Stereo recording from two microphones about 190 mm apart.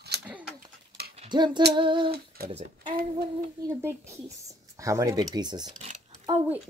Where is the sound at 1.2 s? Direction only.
25° right (ahead or behind).